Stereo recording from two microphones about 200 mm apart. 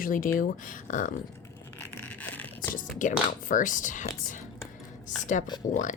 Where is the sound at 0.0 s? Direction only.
45° left (ahead or behind).